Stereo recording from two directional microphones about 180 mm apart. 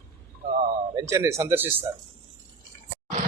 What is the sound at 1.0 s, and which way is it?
Speech, 15° right (ahead or behind).